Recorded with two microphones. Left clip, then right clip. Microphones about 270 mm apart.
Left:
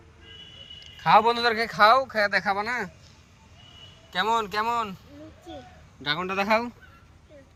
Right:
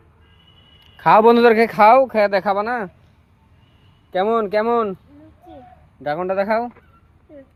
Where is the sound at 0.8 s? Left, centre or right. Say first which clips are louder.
Right 6 dB; right.